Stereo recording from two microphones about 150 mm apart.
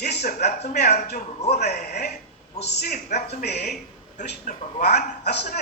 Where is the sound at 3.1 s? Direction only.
90° left.